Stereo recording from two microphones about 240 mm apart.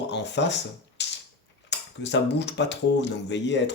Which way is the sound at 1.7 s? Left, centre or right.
Left.